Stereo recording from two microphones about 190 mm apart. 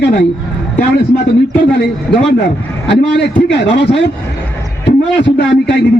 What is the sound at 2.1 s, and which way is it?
Speech, 5° left (ahead or behind).